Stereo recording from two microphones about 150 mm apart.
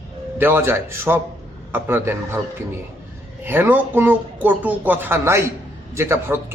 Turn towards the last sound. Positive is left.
turn(degrees=-15)  # may be behind; listen again after turning